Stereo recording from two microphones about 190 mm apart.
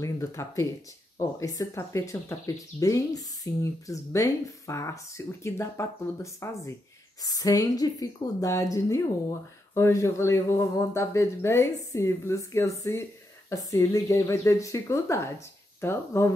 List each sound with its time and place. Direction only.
0.0 s a woman's voice: 15° left (ahead or behind)